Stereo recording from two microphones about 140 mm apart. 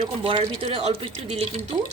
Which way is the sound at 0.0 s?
40° right (ahead or behind).